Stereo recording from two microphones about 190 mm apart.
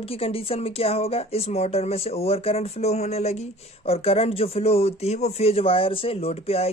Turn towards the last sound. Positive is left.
turn(degrees=30)  # may be behind; listen again after turning